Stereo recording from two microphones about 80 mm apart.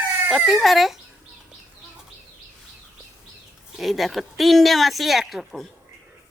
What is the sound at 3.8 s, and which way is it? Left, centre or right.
A woman's voice, centre.